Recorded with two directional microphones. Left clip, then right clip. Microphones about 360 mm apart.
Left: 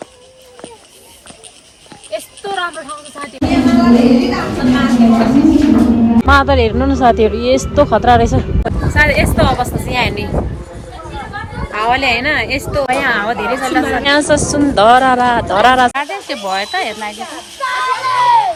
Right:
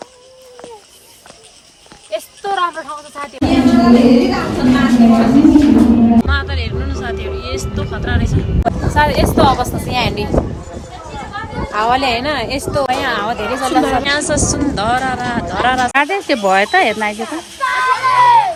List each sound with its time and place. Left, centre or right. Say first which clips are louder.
3.2 s speech: even; centre
9.0 s speech: left 1 dB; centre
11.7 s speech: left 1 dB; centre
14.0 s speech: left 4 dB; centre
17.2 s children playing: right 2 dB; left